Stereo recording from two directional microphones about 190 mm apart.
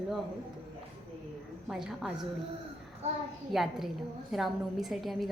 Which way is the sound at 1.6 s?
Centre (ahead or behind).